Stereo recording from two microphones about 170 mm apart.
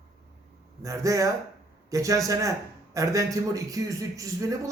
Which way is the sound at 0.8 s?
20° right (ahead or behind).